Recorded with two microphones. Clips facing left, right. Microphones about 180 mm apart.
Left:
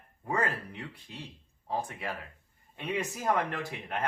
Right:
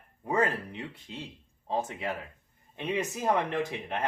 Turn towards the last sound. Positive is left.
turn(degrees=-20)  # may be behind; listen again after turning